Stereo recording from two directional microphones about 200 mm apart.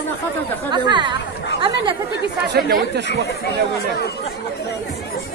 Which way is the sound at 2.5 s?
55° right (ahead or behind).